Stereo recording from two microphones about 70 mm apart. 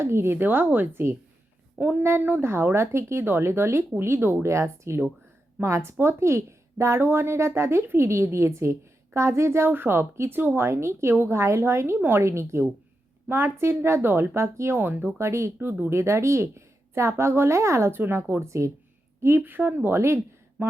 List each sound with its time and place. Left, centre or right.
0.0 s speech: right
15.3 s speech: right
15.5 s speech: right
19.4 s speech: right